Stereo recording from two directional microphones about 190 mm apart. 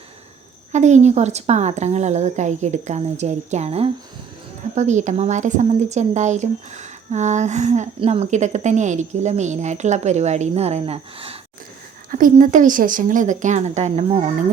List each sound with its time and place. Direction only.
0.7 s speech: 35° right (ahead or behind)
12.1 s speech: 45° right (ahead or behind)